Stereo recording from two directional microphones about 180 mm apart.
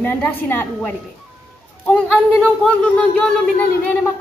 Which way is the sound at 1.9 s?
5° left (ahead or behind).